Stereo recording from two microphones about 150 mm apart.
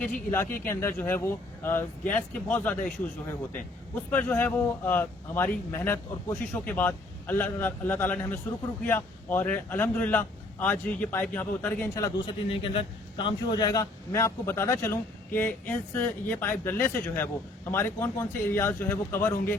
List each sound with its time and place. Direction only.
0.0 s a man's voice: 10° left (ahead or behind)
4.1 s a man's voice: 10° left (ahead or behind)
12.2 s a man's voice: 35° left (ahead or behind); by 19.5 s 15° left (ahead or behind)